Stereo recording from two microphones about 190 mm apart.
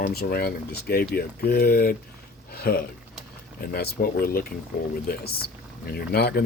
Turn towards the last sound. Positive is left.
turn(degrees=55)  # may be behind; listen again after turning